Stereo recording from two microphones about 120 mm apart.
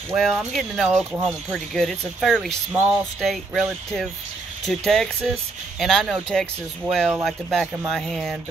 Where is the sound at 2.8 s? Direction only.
15° right (ahead or behind).